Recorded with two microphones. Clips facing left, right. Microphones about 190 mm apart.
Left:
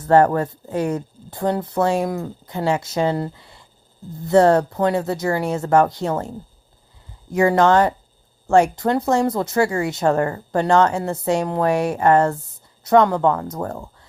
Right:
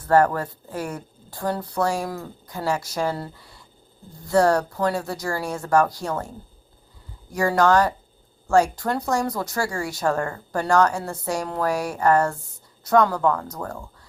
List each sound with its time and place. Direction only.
0.1 s speech: 25° left (ahead or behind)